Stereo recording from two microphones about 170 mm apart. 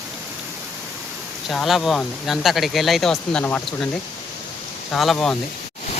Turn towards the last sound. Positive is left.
turn(degrees=0)  # may be behind; listen again after turning